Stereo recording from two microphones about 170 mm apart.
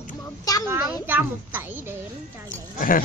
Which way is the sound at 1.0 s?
10° right (ahead or behind).